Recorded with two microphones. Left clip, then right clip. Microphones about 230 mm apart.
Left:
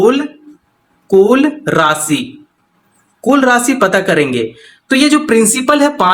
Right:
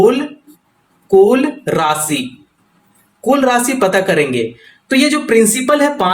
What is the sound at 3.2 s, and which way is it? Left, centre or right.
Speech, left.